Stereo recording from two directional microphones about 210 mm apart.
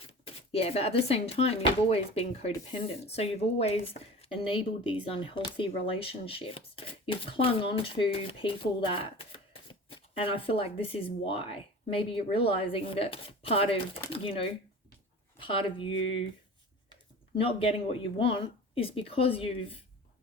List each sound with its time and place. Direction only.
0.0 s speech: 25° left (ahead or behind)
17.3 s speech: 25° left (ahead or behind)